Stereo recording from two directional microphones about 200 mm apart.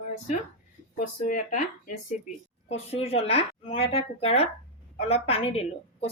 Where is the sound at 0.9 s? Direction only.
40° left (ahead or behind).